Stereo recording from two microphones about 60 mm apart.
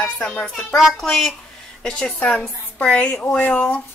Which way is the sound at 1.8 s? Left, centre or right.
Left.